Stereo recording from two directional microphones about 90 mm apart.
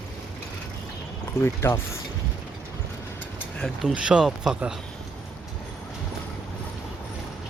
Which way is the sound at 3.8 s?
5° right (ahead or behind).